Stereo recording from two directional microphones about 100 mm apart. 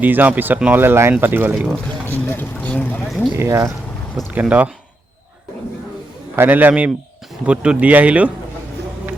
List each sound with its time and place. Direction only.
0.0 s speech: 15° right (ahead or behind)
2.1 s speech: 20° left (ahead or behind)
3.3 s speech: 30° right (ahead or behind)
4.3 s speech: 15° right (ahead or behind)
6.3 s speech: 20° right (ahead or behind)